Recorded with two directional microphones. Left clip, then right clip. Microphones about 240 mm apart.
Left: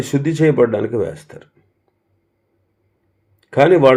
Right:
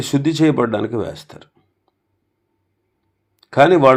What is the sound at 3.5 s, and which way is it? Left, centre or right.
Speech, right.